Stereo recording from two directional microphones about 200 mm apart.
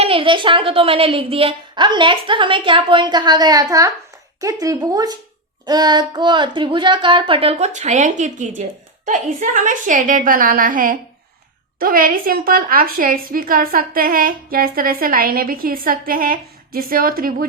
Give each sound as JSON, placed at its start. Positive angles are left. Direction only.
{"t": 0.0, "sound": "a woman's voice", "side_deg": -25}